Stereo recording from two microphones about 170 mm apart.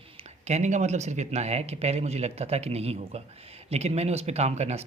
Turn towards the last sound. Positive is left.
turn(degrees=-40)  # may be behind; listen again after turning